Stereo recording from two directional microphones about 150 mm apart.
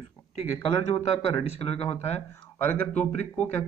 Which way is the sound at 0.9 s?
40° left (ahead or behind).